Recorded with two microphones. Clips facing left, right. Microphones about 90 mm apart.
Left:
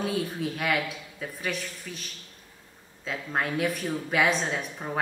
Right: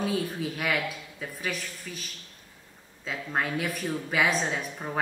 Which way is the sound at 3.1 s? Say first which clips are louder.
Even; centre (ahead or behind).